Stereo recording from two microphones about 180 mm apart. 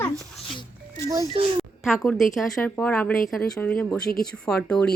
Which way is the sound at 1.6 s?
Centre (ahead or behind).